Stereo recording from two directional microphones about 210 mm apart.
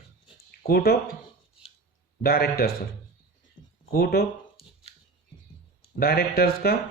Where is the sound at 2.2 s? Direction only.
45° left (ahead or behind).